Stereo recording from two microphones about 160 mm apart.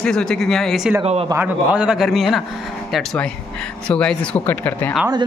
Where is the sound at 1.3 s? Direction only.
10° right (ahead or behind); by 4.9 s 10° left (ahead or behind).